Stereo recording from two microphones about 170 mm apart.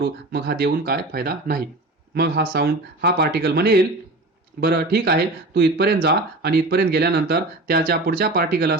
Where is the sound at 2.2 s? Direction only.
70° right (ahead or behind).